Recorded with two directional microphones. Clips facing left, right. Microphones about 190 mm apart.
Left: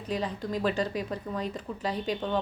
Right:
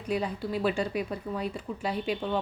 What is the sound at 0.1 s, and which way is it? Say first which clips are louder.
Speech: right 1 dB; 10° right (ahead or behind).